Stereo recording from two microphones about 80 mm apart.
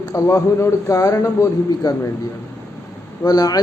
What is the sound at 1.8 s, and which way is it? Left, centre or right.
Speech, left.